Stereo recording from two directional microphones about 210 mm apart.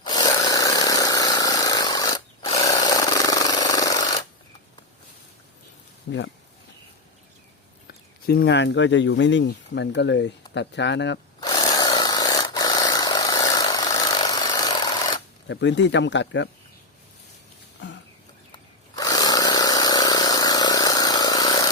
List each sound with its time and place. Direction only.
0.0 s power tool: 20° left (ahead or behind)
6.1 s speech: 55° left (ahead or behind)
8.3 s speech: 50° left (ahead or behind)
11.4 s tools: 20° left (ahead or behind)
15.4 s speech: 60° left (ahead or behind)
17.7 s a sound: 60° left (ahead or behind)
18.9 s a sound: 20° left (ahead or behind)